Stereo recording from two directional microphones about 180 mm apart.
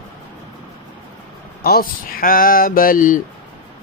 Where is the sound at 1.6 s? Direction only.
55° left (ahead or behind).